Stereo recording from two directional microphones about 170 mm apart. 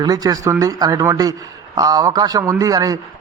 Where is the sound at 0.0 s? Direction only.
20° right (ahead or behind).